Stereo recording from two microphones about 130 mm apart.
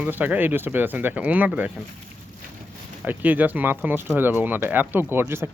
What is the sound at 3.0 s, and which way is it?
Speech, 15° right (ahead or behind).